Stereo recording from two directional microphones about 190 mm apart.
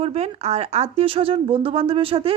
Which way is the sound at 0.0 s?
35° right (ahead or behind).